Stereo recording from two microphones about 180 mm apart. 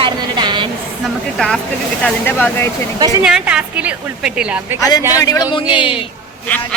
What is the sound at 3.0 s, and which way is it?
Speech, 20° right (ahead or behind).